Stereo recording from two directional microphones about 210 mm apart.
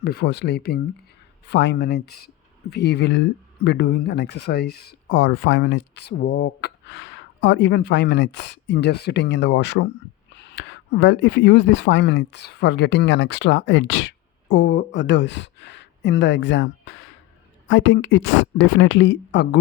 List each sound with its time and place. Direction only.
0.0 s speech: 50° left (ahead or behind)